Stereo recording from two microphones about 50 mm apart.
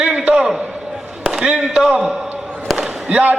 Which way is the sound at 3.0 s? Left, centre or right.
Right.